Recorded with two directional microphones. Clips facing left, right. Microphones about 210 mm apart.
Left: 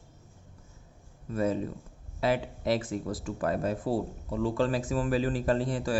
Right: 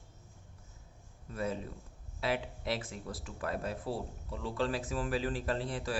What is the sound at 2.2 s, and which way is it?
Speech, 40° left (ahead or behind).